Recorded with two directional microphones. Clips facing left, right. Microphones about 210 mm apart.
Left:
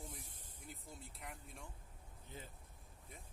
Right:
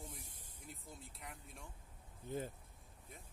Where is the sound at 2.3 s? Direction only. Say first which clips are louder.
Right 12 dB; 50° right (ahead or behind).